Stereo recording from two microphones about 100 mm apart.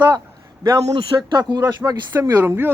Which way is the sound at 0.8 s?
65° right (ahead or behind).